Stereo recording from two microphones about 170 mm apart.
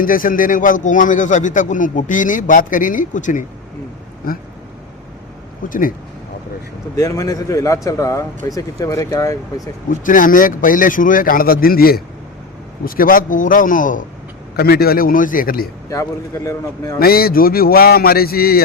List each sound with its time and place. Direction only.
0.0 s speech: 55° left (ahead or behind)
4.3 s a man's voice: 60° left (ahead or behind)
5.6 s speech: 50° left (ahead or behind)
6.9 s a man's voice: 20° left (ahead or behind)
9.9 s speech: 50° left (ahead or behind)
14.5 s a man's voice: 65° left (ahead or behind)
15.9 s a man's voice: 20° left (ahead or behind)
17.0 s a man's voice: 60° left (ahead or behind)